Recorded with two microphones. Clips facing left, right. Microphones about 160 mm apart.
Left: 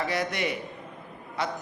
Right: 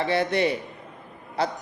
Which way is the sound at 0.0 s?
30° right (ahead or behind).